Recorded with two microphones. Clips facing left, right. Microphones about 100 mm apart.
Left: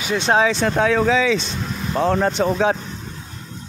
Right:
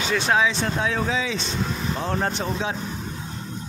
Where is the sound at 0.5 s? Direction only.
80° left.